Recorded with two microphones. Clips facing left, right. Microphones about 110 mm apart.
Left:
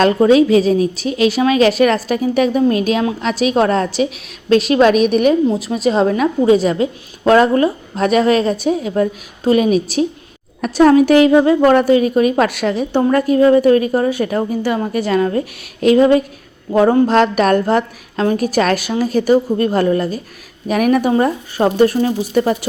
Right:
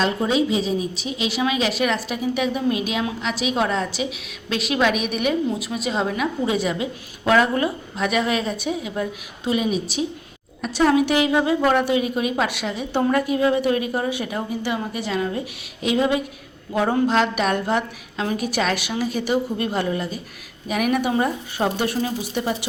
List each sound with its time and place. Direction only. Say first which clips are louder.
0.3 s a woman's voice: left 9 dB; 55° left (ahead or behind)
12.9 s a woman's voice: left 5 dB; 35° left (ahead or behind)